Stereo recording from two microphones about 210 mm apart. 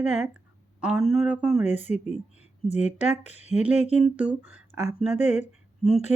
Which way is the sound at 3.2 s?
30° left (ahead or behind).